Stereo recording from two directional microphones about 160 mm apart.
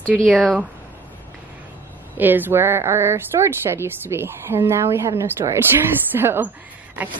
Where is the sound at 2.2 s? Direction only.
10° right (ahead or behind).